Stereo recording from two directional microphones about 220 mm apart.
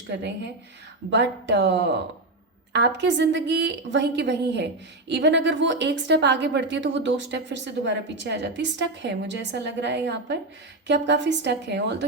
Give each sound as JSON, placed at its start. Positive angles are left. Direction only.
{"t": 0.1, "sound": "a woman's voice", "side_deg": -50}